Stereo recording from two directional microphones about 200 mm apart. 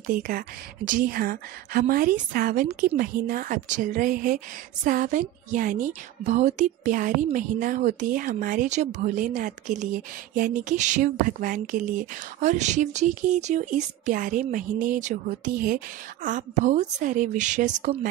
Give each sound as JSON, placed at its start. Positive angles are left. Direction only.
{"t": 0.0, "sound": "speech", "side_deg": -45}